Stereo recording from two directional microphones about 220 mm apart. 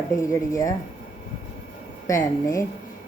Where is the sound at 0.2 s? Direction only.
15° left (ahead or behind).